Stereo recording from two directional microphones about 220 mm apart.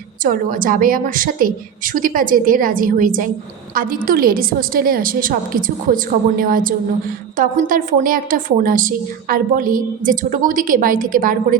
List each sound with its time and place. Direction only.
0.3 s a woman's voice: 40° right (ahead or behind)